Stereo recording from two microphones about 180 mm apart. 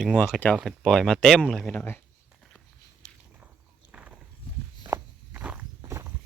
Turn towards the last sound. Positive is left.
turn(degrees=-15)  # may be behind; listen again after turning